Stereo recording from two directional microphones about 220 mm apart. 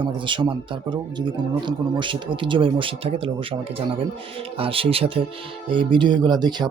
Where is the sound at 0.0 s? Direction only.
20° right (ahead or behind).